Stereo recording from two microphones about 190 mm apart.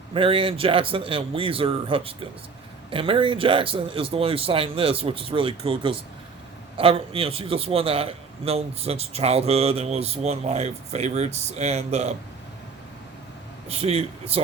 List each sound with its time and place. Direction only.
0.1 s a man's voice: 30° right (ahead or behind)
13.7 s a man's voice: 30° right (ahead or behind)